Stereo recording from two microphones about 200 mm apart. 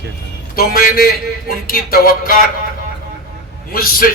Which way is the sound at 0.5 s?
45° left (ahead or behind).